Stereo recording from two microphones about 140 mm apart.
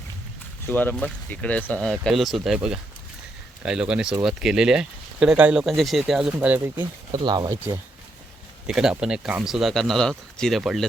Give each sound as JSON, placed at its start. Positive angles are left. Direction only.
{"t": 0.7, "sound": "speech", "side_deg": 10}
{"t": 7.1, "sound": "speech", "side_deg": -30}
{"t": 8.6, "sound": "speech", "side_deg": -5}